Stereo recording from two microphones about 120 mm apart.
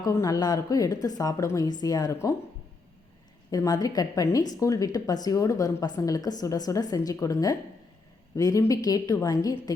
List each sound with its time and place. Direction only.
0.0 s a woman's voice: 25° left (ahead or behind)
3.5 s a woman's voice: 30° left (ahead or behind)